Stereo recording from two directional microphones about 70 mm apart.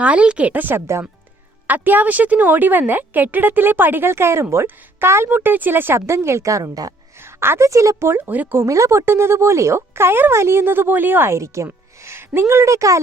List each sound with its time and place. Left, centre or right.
0.0 s a woman's voice: centre
6.1 s speech: right
7.3 s a woman's voice: right
7.7 s speech: right
8.6 s speech: right
11.3 s a woman's voice: right